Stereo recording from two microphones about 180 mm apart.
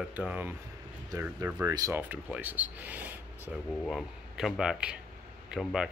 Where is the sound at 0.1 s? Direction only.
10° right (ahead or behind).